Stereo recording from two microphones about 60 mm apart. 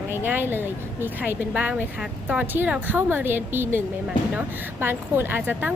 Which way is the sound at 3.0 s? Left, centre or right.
Right.